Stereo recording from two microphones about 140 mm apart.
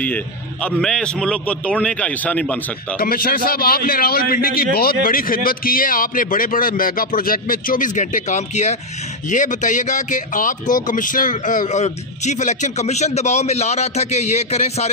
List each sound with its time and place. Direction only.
0.7 s a man's voice: 5° left (ahead or behind)
3.0 s a man's voice: 90° left; by 14.9 s 50° left (ahead or behind)